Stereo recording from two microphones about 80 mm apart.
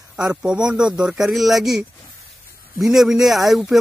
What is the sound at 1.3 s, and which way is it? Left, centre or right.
Speech, centre.